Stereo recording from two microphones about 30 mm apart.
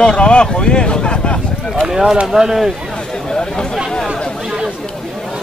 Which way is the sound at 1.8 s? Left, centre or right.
Right.